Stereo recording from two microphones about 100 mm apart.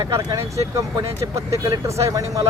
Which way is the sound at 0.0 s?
35° right (ahead or behind).